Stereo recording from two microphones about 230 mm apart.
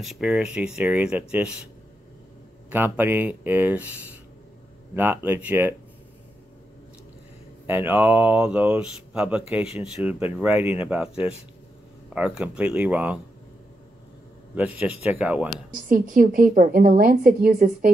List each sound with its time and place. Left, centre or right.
0.0 s speech: centre
2.7 s speech: centre
4.9 s speech: centre
7.6 s speech: centre
14.5 s speech: centre
15.7 s a woman's voice: right